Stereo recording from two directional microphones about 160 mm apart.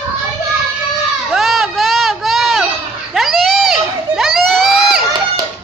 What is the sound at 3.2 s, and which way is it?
Crowd, centre (ahead or behind).